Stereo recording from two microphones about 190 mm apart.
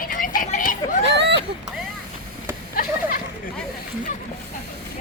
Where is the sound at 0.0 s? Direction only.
45° left (ahead or behind).